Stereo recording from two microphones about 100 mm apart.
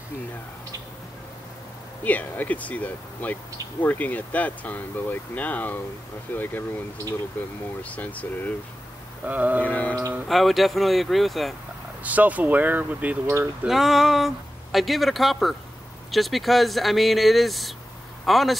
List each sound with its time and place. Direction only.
2.0 s speech: 15° left (ahead or behind)
7.8 s speech: 15° left (ahead or behind)
9.2 s speech: 15° right (ahead or behind)
9.6 s speech: 15° left (ahead or behind)
10.2 s speech: centre (ahead or behind)
12.0 s speech: 15° right (ahead or behind)
13.7 s speech: centre (ahead or behind)